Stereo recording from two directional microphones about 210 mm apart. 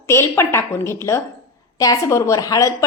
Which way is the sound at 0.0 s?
10° left (ahead or behind).